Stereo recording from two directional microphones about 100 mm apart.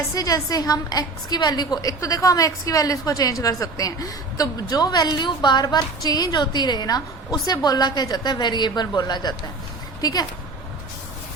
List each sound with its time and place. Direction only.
0.1 s a woman's voice: 35° left (ahead or behind)